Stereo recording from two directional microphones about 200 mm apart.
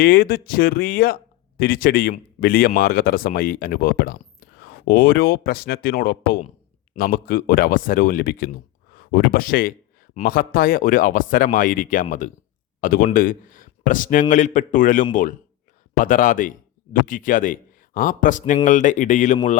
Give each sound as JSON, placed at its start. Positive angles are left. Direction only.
{"t": 0.0, "sound": "a man's voice", "side_deg": 45}